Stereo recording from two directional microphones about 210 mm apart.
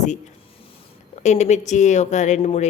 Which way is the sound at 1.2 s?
35° left (ahead or behind).